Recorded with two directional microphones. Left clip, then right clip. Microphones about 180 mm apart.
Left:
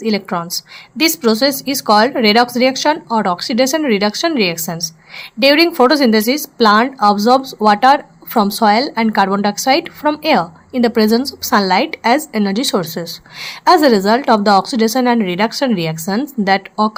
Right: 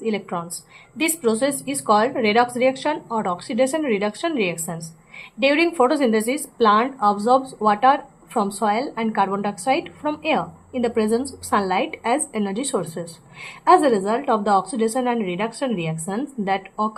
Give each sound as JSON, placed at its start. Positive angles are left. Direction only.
{"t": 0.0, "sound": "speech", "side_deg": 25}